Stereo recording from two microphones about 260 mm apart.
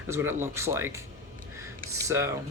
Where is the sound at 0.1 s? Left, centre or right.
Centre.